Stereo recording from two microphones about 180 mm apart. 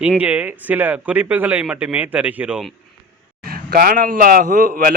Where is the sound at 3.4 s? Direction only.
55° right (ahead or behind).